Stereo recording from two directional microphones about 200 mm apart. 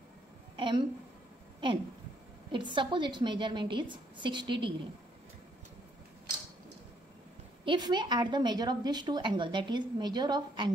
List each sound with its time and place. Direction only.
0.6 s a woman's voice: 25° right (ahead or behind)
2.5 s a woman's voice: 25° right (ahead or behind)
7.6 s a woman's voice: 25° right (ahead or behind)